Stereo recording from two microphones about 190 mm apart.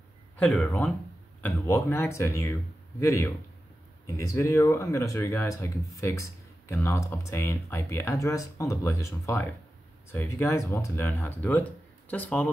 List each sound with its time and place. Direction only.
0.4 s speech: 5° left (ahead or behind)